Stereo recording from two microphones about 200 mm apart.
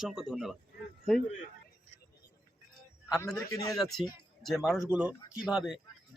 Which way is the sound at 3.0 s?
15° left (ahead or behind).